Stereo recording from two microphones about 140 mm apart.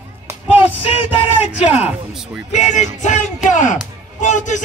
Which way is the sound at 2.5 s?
60° left (ahead or behind).